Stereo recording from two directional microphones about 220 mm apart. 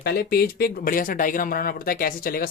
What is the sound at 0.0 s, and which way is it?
Speech, 45° left (ahead or behind).